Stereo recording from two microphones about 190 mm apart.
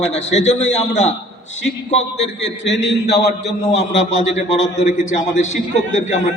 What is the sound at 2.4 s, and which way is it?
A man's voice, 65° left (ahead or behind).